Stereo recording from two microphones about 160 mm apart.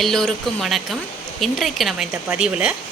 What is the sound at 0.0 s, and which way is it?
Speech, centre (ahead or behind).